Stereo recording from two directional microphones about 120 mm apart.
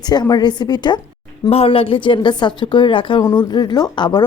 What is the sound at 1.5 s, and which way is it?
A woman's voice, 55° left (ahead or behind).